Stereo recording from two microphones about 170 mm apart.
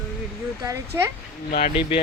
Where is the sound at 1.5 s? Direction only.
45° left (ahead or behind).